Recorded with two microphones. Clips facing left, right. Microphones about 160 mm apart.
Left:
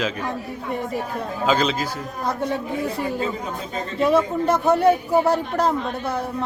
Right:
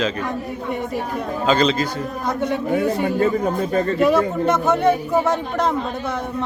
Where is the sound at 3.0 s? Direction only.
55° right (ahead or behind).